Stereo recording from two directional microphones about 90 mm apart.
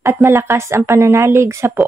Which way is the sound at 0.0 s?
25° right (ahead or behind).